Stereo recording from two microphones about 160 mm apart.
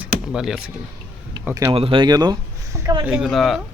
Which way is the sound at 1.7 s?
30° right (ahead or behind).